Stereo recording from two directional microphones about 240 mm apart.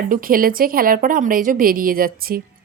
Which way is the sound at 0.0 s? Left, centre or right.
Right.